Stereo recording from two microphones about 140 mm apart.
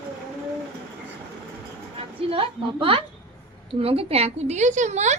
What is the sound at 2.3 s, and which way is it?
A woman's voice, 40° right (ahead or behind).